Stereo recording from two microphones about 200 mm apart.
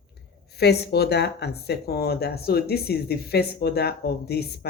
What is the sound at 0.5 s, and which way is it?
Speech, 55° left (ahead or behind).